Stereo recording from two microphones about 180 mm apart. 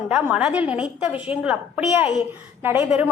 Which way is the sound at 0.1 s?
5° right (ahead or behind).